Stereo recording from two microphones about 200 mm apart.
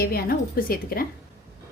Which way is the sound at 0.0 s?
50° left (ahead or behind).